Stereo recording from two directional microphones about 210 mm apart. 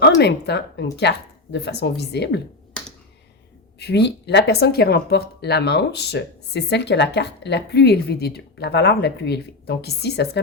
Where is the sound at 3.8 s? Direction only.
50° left (ahead or behind).